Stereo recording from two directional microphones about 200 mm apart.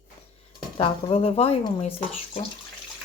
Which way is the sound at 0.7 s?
25° left (ahead or behind).